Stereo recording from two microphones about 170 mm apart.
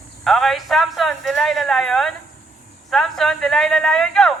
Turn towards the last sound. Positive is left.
turn(degrees=5)  # may be behind; listen again after turning